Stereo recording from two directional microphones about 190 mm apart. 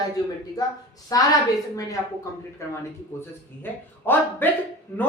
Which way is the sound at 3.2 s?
10° left (ahead or behind).